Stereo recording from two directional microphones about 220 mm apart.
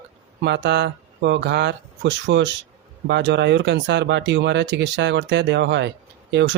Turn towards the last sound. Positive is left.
turn(degrees=-55)  # may be behind; listen again after turning